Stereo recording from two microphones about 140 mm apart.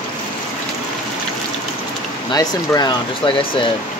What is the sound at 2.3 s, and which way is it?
Speech, 30° left (ahead or behind).